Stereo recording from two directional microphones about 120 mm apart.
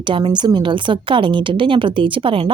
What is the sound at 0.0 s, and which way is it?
A woman's voice, 45° right (ahead or behind).